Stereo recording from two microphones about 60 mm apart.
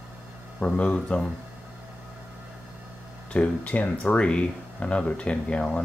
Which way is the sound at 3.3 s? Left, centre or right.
Left.